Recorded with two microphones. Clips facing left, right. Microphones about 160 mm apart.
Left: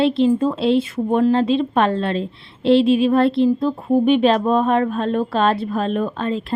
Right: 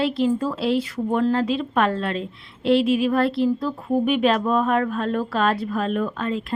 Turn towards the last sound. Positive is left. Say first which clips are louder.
# left 3 dB
turn(degrees=30)  # may be behind; listen again after turning